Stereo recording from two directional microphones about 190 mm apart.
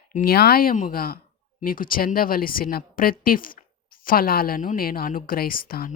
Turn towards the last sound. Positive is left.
turn(degrees=50)  # may be behind; listen again after turning